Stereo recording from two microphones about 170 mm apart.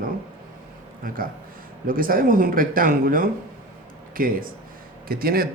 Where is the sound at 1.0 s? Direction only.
55° right (ahead or behind).